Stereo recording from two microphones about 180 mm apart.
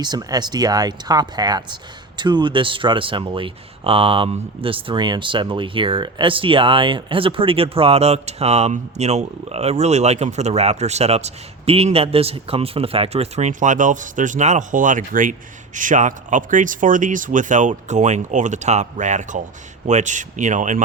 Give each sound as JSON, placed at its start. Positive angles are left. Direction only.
{"t": 0.0, "sound": "speech", "side_deg": -20}